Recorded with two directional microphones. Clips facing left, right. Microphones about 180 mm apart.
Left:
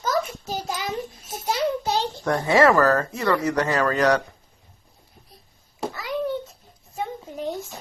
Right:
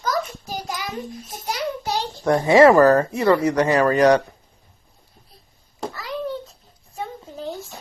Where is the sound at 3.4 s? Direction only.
15° right (ahead or behind).